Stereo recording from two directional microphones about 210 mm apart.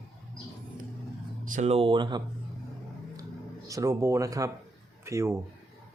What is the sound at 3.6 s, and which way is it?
Speech, 15° right (ahead or behind).